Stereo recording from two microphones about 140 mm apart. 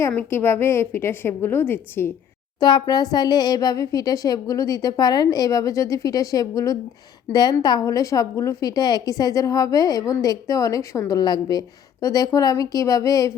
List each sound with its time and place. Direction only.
0.1 s a woman's voice: 15° left (ahead or behind)
2.6 s a woman's voice: 30° left (ahead or behind)